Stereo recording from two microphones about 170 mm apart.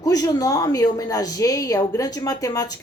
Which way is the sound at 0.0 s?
20° left (ahead or behind).